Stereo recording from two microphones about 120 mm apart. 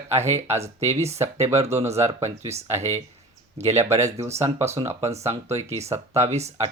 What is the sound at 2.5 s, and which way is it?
Speech, 65° right (ahead or behind).